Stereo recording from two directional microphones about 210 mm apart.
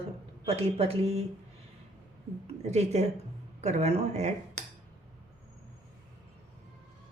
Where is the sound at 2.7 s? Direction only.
30° right (ahead or behind).